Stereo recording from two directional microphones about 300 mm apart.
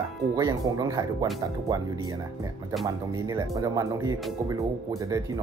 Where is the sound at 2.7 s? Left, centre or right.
Centre.